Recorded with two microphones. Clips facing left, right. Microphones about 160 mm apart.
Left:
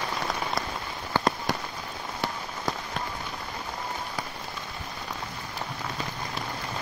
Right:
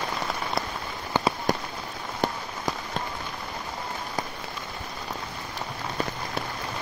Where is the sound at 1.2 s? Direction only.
20° right (ahead or behind).